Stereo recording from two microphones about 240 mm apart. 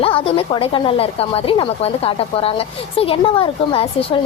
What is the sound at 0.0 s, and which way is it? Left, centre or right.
Speech, left.